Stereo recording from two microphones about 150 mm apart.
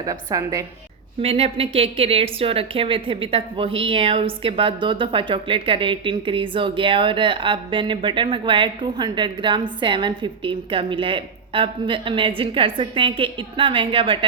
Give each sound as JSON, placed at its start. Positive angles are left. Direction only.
{"t": 0.0, "sound": "a woman's voice", "side_deg": -25}
{"t": 1.2, "sound": "speech", "side_deg": -40}